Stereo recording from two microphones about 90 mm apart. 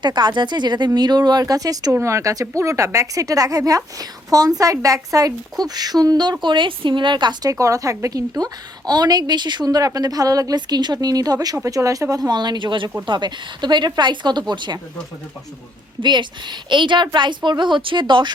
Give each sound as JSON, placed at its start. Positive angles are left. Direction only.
{"t": 0.0, "sound": "speech", "side_deg": -55}
{"t": 6.4, "sound": "speech", "side_deg": -60}
{"t": 7.5, "sound": "speech", "side_deg": -40}
{"t": 16.0, "sound": "speech", "side_deg": -55}